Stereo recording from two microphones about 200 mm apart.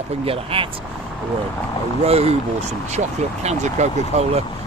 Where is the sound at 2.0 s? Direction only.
30° right (ahead or behind).